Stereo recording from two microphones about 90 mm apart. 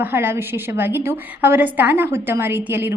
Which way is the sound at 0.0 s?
25° right (ahead or behind).